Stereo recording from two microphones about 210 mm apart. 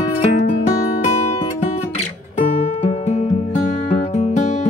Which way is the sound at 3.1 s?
30° left (ahead or behind).